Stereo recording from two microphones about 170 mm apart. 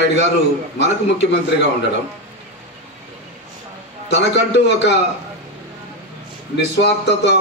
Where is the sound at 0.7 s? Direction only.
90° left.